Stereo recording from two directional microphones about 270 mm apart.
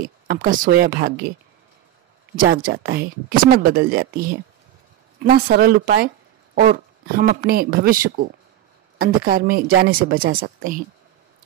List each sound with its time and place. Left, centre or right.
0.0 s speech: right
2.4 s speech: right
9.2 s speech: right